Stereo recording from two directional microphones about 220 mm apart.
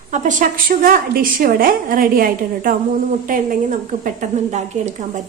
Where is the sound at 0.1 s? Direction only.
35° right (ahead or behind).